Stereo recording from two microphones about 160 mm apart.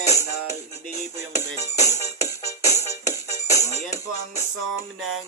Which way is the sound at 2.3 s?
20° left (ahead or behind).